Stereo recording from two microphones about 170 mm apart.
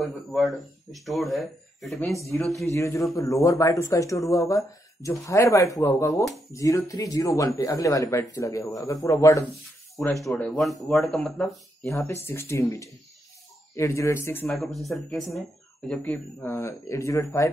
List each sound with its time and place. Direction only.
0.0 s speech: centre (ahead or behind)
2.6 s speech: 15° left (ahead or behind)
10.2 s speech: 10° left (ahead or behind)
12.1 s speech: 15° left (ahead or behind)
14.5 s speech: centre (ahead or behind); by 17.5 s 15° left (ahead or behind)